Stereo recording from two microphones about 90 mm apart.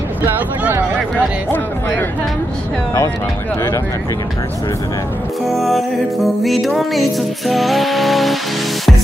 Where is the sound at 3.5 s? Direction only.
30° left (ahead or behind).